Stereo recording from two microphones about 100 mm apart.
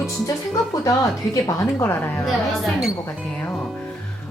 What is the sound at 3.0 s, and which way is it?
Speech, 20° left (ahead or behind).